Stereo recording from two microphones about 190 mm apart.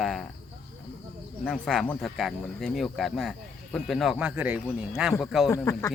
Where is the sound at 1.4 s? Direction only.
Centre (ahead or behind).